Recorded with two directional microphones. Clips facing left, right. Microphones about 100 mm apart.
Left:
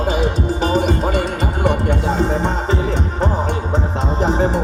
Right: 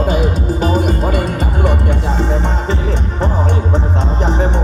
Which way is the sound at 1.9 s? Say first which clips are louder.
Even; 40° left (ahead or behind).